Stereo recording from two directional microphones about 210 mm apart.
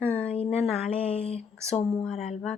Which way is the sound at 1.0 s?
30° left (ahead or behind).